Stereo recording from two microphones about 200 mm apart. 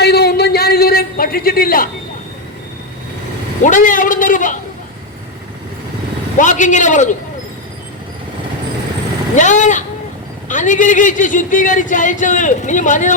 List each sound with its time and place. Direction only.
0.0 s a sound: 55° left (ahead or behind)
3.6 s speech: 40° left (ahead or behind)
6.4 s speech: 40° left (ahead or behind)
9.3 s speech: 40° left (ahead or behind)